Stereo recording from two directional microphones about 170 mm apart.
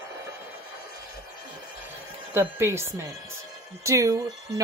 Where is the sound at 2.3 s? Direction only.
15° right (ahead or behind).